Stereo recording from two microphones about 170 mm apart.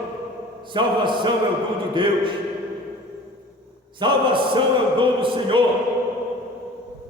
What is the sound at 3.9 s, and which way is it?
A man's voice, 30° right (ahead or behind).